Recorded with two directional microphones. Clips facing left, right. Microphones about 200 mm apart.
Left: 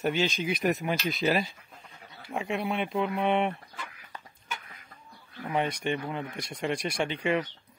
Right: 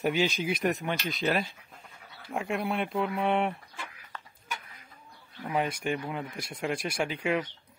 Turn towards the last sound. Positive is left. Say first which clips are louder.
# left 1 dB
turn(degrees=-5)  # may be behind; listen again after turning